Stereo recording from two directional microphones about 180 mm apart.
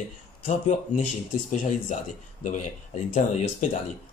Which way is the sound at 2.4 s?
45° left (ahead or behind).